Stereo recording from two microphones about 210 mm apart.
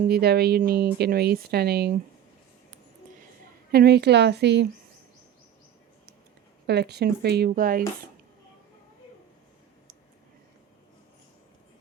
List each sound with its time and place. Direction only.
0.1 s speech: 50° right (ahead or behind)
3.7 s speech: 50° right (ahead or behind)
6.7 s speech: 50° right (ahead or behind)